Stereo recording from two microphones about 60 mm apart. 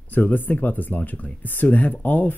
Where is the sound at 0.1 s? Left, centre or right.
Left.